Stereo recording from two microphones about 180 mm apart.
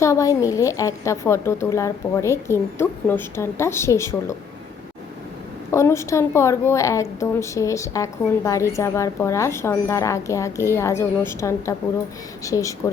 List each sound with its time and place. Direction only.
0.0 s a woman's voice: 15° left (ahead or behind)
5.7 s a woman's voice: 15° left (ahead or behind)